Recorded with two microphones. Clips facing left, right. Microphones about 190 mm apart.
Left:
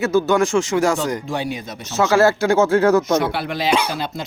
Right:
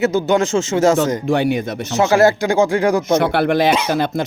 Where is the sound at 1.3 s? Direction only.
60° right (ahead or behind).